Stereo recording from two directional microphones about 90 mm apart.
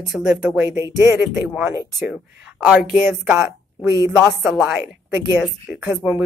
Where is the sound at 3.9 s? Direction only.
35° right (ahead or behind).